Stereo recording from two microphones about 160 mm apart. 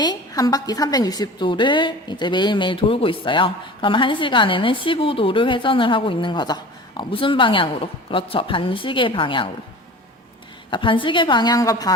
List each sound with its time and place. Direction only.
0.0 s a woman's voice: 25° left (ahead or behind)
10.7 s a woman's voice: 30° left (ahead or behind)